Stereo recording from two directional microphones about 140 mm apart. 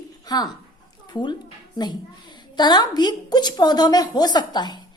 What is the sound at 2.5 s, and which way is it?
A woman's voice, 30° left (ahead or behind).